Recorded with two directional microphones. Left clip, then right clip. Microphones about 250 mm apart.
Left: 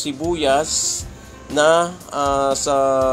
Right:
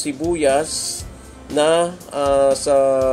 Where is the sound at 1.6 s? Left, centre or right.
Centre.